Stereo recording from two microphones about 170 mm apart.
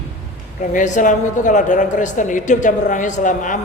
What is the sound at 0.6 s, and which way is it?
A woman's voice, 45° left (ahead or behind).